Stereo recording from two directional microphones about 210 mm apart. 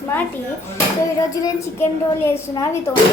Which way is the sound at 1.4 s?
15° left (ahead or behind).